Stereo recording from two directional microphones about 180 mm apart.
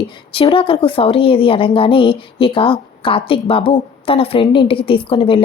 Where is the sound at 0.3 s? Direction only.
30° left (ahead or behind).